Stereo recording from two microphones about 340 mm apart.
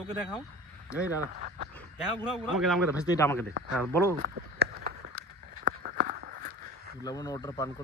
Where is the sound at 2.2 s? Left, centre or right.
Centre.